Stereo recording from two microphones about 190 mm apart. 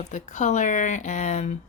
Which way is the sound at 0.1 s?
40° left (ahead or behind).